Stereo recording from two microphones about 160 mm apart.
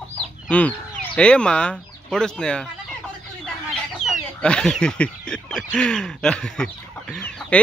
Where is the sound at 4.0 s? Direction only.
5° left (ahead or behind).